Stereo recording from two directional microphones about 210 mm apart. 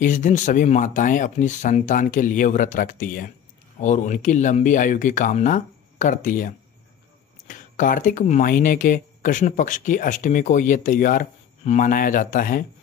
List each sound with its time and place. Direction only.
0.0 s speech: 35° left (ahead or behind)